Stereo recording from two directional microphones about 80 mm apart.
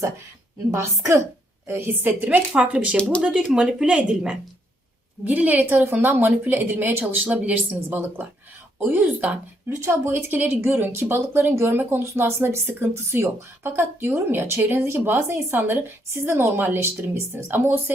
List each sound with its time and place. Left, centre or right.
0.7 s a woman's voice: right; by 4.4 s centre
5.2 s speech: centre
9.6 s speech: right